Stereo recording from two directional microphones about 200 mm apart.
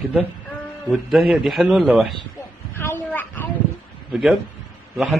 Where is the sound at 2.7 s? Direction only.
10° left (ahead or behind).